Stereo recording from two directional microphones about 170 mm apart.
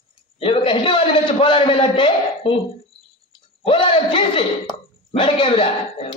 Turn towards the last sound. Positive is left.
turn(degrees=35)  # may be behind; listen again after turning